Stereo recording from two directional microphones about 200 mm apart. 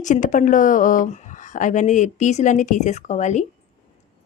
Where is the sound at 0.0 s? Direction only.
40° left (ahead or behind).